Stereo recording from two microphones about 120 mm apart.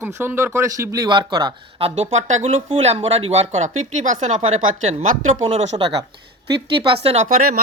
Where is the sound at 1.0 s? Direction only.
40° right (ahead or behind).